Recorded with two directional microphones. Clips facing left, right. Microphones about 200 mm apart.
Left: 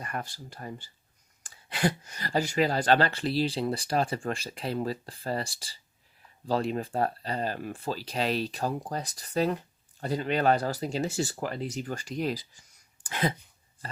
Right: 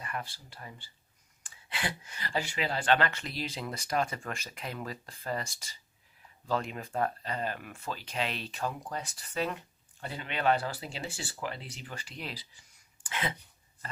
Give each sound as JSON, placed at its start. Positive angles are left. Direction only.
{"t": 0.0, "sound": "speech", "side_deg": 45}